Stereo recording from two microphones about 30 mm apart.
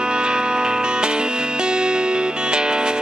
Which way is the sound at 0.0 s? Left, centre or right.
Right.